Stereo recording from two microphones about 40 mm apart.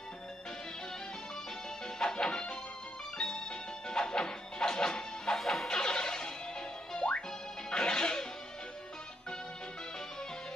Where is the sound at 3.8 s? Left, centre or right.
Centre.